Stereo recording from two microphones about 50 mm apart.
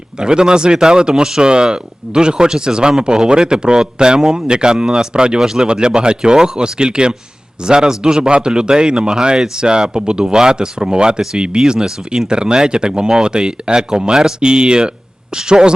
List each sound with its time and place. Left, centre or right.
0.2 s speech: centre